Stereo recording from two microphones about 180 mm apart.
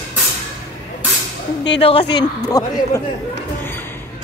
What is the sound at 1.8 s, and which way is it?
Speech, 30° left (ahead or behind).